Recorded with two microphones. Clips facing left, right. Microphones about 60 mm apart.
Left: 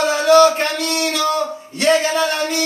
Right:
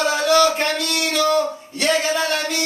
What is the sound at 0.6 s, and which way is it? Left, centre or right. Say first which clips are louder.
Speech: left 2 dB; left.